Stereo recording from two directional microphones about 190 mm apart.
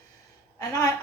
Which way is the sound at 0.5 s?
20° left (ahead or behind).